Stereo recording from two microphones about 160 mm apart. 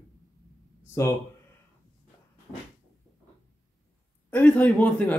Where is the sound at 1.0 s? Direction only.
20° left (ahead or behind).